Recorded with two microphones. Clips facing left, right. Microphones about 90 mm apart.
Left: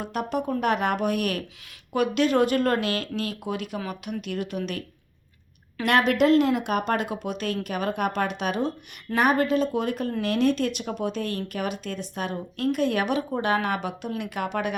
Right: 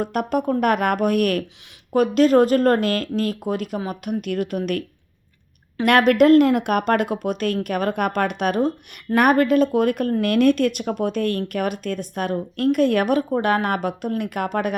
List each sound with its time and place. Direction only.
0.0 s speech: 50° right (ahead or behind)
5.8 s speech: 50° right (ahead or behind)